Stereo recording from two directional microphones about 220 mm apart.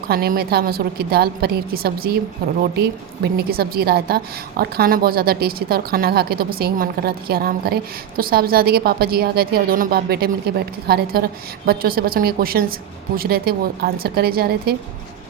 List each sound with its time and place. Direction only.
0.1 s a woman's voice: 45° right (ahead or behind)